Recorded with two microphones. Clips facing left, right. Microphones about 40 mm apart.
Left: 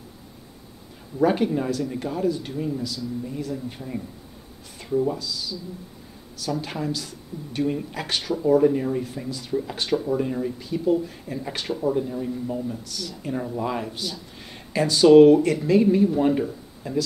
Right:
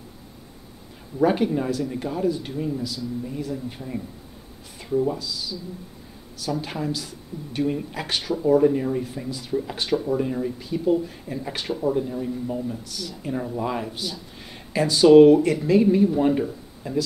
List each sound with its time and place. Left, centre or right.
1.2 s a woman's voice: centre